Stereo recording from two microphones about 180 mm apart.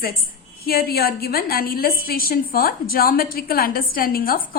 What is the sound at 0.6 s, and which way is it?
A woman's voice, 55° left (ahead or behind).